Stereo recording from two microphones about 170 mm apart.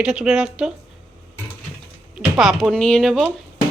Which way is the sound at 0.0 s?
5° right (ahead or behind).